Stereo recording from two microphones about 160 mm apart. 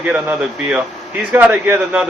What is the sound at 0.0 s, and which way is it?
A man's voice, 10° right (ahead or behind).